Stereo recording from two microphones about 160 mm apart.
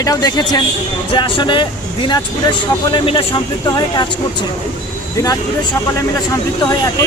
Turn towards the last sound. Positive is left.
turn(degrees=20)  # may be behind; listen again after turning